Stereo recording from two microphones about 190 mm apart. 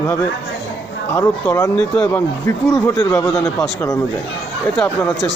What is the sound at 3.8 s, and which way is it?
Speech, 15° left (ahead or behind).